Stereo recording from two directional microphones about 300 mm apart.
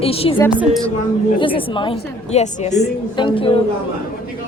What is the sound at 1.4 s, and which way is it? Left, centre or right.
A woman's voice, centre.